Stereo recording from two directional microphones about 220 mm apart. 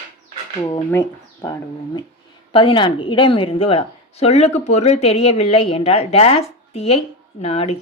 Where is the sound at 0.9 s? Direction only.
10° left (ahead or behind).